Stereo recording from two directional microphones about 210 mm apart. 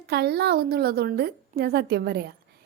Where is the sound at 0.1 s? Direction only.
50° right (ahead or behind).